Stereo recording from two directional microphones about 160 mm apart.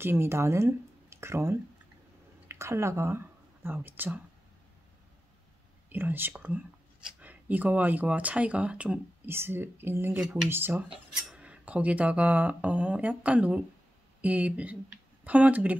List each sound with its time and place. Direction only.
0.0 s speech: 15° right (ahead or behind)
5.9 s speech: 10° right (ahead or behind)